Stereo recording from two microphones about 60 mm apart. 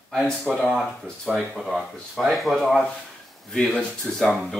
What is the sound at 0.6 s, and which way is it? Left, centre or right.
Speech, centre.